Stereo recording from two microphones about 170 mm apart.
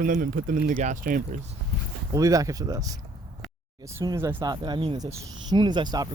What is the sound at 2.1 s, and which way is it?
Speech, 20° right (ahead or behind).